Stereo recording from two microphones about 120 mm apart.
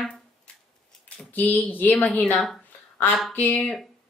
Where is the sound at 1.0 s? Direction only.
15° left (ahead or behind).